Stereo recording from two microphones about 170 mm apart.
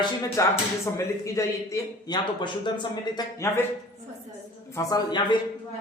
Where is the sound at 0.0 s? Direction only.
20° left (ahead or behind).